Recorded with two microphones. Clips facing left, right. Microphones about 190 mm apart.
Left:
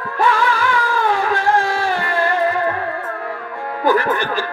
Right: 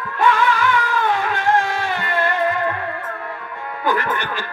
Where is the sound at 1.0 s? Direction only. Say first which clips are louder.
Left 2 dB; 40° left (ahead or behind).